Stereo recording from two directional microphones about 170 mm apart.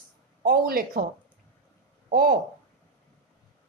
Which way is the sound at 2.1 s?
60° right (ahead or behind).